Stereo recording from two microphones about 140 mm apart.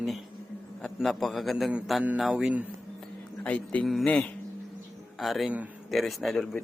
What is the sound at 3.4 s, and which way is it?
A man's voice, 10° left (ahead or behind).